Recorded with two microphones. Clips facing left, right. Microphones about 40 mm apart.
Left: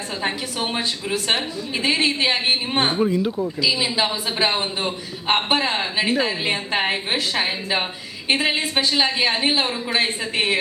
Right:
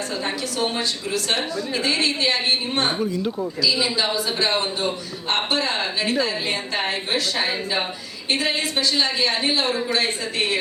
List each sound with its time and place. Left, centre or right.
0.2 s a woman's voice: left